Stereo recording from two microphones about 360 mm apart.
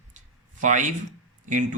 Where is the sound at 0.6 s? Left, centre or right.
Right.